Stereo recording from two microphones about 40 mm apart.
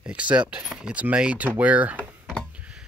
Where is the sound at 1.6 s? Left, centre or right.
Right.